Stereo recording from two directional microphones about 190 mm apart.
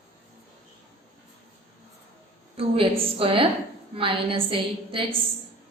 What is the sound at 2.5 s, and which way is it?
A woman's voice, 30° right (ahead or behind).